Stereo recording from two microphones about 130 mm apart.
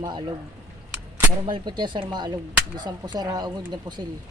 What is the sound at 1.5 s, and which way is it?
Speech, 35° right (ahead or behind).